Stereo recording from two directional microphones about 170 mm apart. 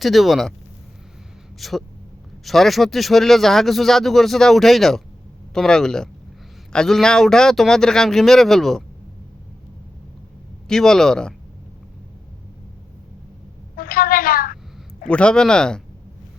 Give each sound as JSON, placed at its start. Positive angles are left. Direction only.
{"t": 0.0, "sound": "speech", "side_deg": 0}
{"t": 1.5, "sound": "speech", "side_deg": 0}
{"t": 10.7, "sound": "speech", "side_deg": 5}
{"t": 13.7, "sound": "a sound", "side_deg": 60}
{"t": 15.0, "sound": "speech", "side_deg": 5}